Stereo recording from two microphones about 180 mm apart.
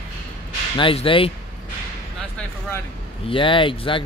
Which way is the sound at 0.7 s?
30° left (ahead or behind).